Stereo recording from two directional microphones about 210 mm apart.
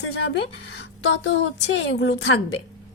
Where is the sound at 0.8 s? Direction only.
60° left (ahead or behind).